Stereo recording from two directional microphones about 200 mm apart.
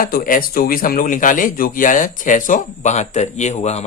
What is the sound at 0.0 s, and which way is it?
A man's voice, 45° left (ahead or behind).